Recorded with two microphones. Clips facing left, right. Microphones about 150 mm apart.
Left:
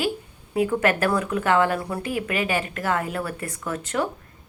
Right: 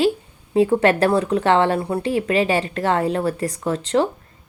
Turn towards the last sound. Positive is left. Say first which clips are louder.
# right 7 dB
turn(degrees=-30)  # may be behind; listen again after turning